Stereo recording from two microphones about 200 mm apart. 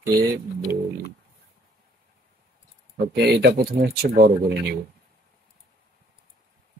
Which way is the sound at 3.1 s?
55° right (ahead or behind).